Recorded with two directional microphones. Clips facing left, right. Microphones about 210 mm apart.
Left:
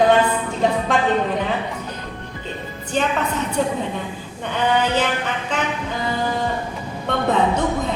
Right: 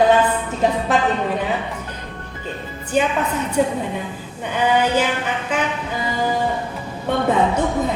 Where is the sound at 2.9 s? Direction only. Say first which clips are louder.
Right 2 dB; 10° right (ahead or behind).